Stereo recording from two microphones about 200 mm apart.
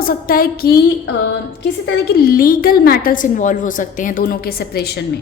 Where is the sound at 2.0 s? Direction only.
50° left (ahead or behind).